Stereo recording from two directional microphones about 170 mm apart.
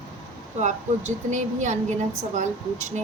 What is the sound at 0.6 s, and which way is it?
Speech, 45° right (ahead or behind).